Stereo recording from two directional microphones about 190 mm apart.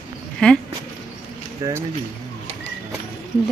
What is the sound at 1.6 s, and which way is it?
Speech, 20° right (ahead or behind).